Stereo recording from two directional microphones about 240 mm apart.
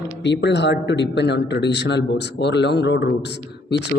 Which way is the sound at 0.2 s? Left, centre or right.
Left.